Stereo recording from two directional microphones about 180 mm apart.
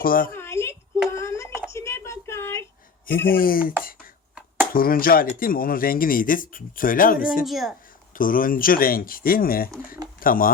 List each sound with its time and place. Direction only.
0.0 s speech: 50° left (ahead or behind)
0.3 s a sound: 15° left (ahead or behind)
3.2 s speech: 55° left (ahead or behind)
7.4 s a woman's voice: centre (ahead or behind)
8.1 s speech: 50° left (ahead or behind)